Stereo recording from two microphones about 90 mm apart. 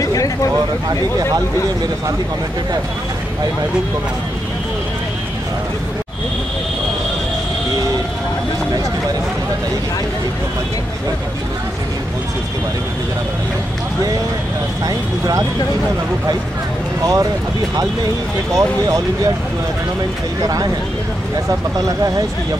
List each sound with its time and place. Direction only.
0.0 s a sound: 40° left (ahead or behind)
14.9 s speech: 40° right (ahead or behind)
17.0 s speech: 40° right (ahead or behind)
18.6 s speech: 35° right (ahead or behind)
21.7 s speech: 40° right (ahead or behind)